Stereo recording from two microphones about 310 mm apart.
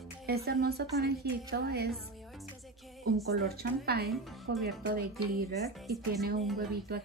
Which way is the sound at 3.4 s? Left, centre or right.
Right.